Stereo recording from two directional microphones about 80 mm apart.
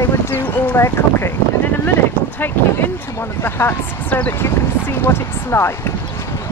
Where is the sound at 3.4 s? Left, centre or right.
Left.